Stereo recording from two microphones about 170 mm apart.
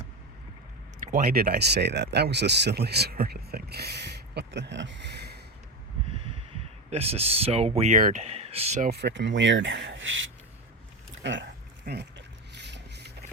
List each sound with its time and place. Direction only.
1.0 s speech: 60° right (ahead or behind); by 5.4 s 75° right (ahead or behind)
6.9 s speech: 35° right (ahead or behind)
8.8 s speech: 75° right (ahead or behind); by 11.4 s 90° right
11.9 s speech: 60° right (ahead or behind)
12.5 s boat: 90° right